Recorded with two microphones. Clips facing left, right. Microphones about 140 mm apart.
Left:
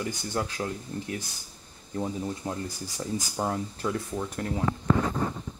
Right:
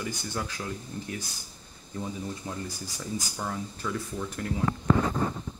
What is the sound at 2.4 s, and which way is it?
Speech, 50° left (ahead or behind).